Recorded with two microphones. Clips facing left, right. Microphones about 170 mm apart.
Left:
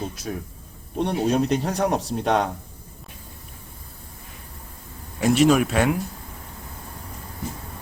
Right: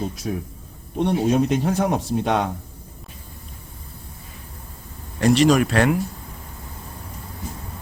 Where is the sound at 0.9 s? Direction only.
15° right (ahead or behind).